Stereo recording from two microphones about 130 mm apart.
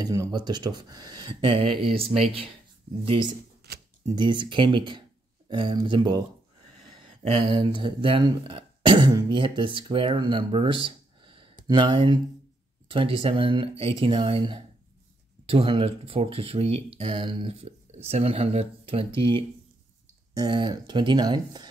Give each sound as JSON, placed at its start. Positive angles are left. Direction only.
{"t": 0.0, "sound": "speech", "side_deg": -30}
{"t": 7.2, "sound": "speech", "side_deg": -40}